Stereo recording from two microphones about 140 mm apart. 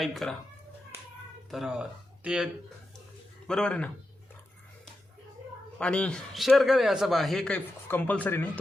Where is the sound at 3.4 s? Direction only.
5° left (ahead or behind).